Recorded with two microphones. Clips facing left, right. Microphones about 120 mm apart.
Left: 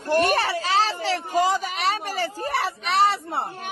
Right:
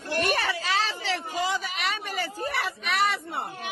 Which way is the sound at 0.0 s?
45° left (ahead or behind).